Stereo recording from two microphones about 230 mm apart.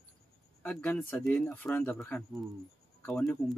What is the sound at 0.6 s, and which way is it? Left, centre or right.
Speech, centre.